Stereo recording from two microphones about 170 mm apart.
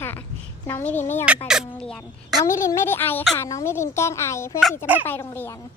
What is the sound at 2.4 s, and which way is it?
A child's voice, 15° left (ahead or behind).